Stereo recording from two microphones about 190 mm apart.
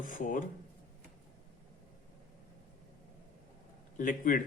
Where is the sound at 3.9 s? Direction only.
45° left (ahead or behind).